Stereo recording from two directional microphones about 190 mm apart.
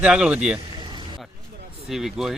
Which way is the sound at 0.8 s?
25° right (ahead or behind).